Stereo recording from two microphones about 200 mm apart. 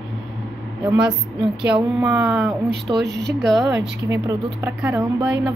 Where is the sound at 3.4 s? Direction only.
Centre (ahead or behind).